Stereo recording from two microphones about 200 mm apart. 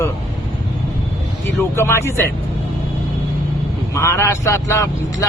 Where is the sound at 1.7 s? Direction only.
15° left (ahead or behind).